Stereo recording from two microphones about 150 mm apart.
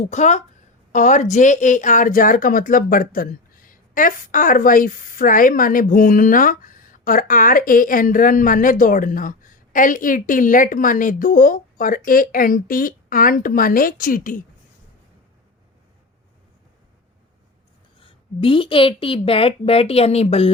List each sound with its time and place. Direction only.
0.0 s speech: 50° left (ahead or behind)
18.0 s a woman's voice: 35° left (ahead or behind)